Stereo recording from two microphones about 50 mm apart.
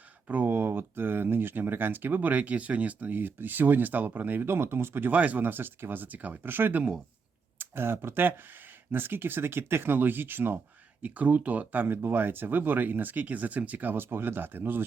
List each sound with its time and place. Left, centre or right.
0.4 s speech: right
4.4 s speech: right
5.1 s speech: right
11.0 s speech: right